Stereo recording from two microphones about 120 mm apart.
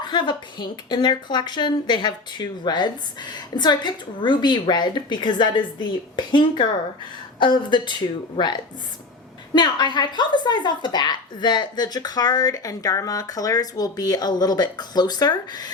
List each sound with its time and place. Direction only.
0.0 s a woman's voice: 40° left (ahead or behind)